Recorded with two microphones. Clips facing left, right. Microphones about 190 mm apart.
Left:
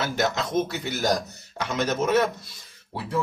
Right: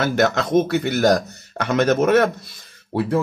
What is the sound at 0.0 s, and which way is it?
A man's voice, 60° right (ahead or behind).